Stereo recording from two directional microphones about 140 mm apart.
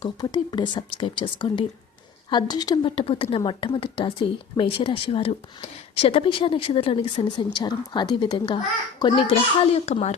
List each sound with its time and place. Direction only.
0.0 s a woman's voice: 30° left (ahead or behind); by 10.2 s 55° left (ahead or behind)